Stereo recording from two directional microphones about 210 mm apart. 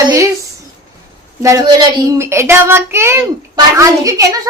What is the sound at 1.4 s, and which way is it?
Speech, 15° right (ahead or behind).